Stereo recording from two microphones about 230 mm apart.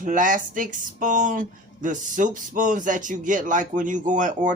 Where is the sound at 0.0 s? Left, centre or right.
Right.